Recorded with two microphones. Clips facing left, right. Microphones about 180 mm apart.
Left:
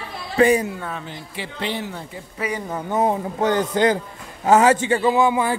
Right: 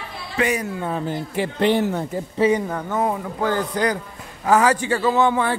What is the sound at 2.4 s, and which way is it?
Speech, 25° right (ahead or behind).